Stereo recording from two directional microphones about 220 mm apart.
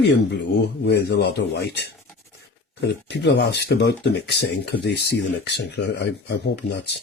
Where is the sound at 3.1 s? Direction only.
50° left (ahead or behind).